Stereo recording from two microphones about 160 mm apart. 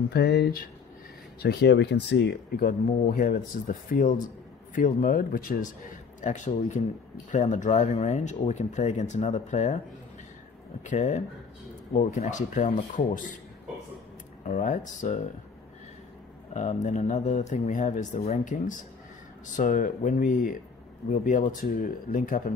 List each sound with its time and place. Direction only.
0.1 s speech: 90° left; by 0.7 s 75° left (ahead or behind)
1.4 s speech: 90° left; by 5.7 s 65° left (ahead or behind)
6.2 s speech: 50° left (ahead or behind)
10.9 s speech: 45° left (ahead or behind)
14.4 s speech: 55° left (ahead or behind)
16.5 s speech: 50° left (ahead or behind)